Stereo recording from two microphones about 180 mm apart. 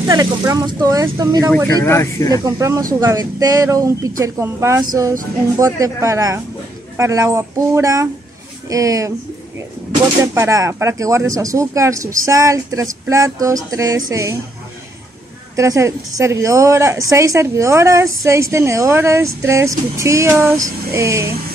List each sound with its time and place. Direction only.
0.0 s speech: 20° right (ahead or behind)
1.8 s speech: 15° left (ahead or behind)
2.4 s a woman's voice: 15° right (ahead or behind)
10.3 s a woman's voice: 15° right (ahead or behind)
15.5 s a woman's voice: 15° right (ahead or behind)